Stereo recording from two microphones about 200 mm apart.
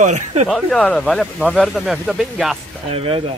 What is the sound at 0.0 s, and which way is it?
Speech, 35° right (ahead or behind).